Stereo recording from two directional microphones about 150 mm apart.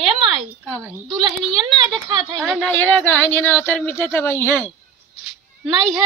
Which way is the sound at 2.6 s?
10° left (ahead or behind).